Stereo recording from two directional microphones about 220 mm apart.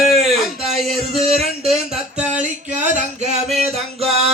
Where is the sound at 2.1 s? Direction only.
5° right (ahead or behind).